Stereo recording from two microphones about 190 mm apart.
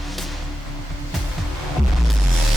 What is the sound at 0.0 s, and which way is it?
Music, centre (ahead or behind).